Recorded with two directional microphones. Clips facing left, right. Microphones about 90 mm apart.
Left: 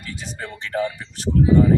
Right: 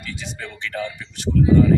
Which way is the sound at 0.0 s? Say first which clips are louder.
Even; 35° left (ahead or behind).